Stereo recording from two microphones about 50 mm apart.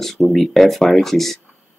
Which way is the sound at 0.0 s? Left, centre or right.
Centre.